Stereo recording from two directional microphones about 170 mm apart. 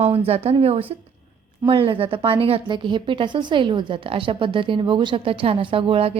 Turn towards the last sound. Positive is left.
turn(degrees=-35)  # may be behind; listen again after turning